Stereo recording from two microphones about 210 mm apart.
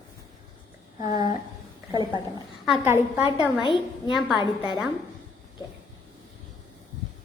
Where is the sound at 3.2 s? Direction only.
25° left (ahead or behind).